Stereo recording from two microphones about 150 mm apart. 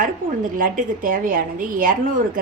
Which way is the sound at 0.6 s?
65° right (ahead or behind).